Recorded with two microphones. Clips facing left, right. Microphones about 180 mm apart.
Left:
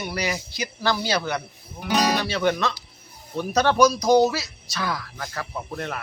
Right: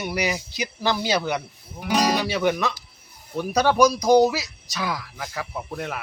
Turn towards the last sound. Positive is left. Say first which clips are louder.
# even
turn(degrees=-5)  # may be behind; listen again after turning